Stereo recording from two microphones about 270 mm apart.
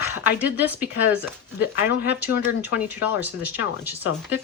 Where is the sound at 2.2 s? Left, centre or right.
Centre.